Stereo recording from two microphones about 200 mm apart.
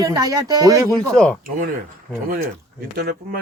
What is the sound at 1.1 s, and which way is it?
Speech, 5° left (ahead or behind).